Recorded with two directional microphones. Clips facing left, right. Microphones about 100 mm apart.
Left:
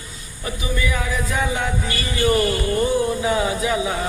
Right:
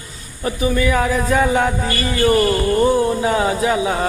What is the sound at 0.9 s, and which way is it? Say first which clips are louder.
Music: right 7 dB; 50° right (ahead or behind).